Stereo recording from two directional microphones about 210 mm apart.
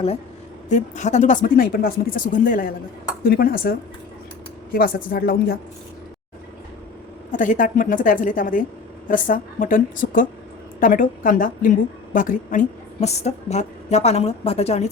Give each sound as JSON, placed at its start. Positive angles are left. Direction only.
{"t": 0.7, "sound": "a woman's voice", "side_deg": 35}
{"t": 7.3, "sound": "a woman's voice", "side_deg": 40}